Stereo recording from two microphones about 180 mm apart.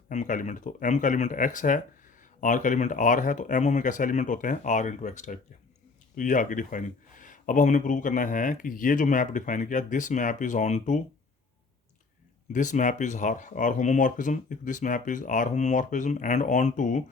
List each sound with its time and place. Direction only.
0.1 s speech: 45° left (ahead or behind)
12.5 s speech: 45° left (ahead or behind)